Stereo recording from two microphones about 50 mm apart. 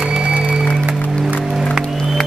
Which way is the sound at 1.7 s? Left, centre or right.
Centre.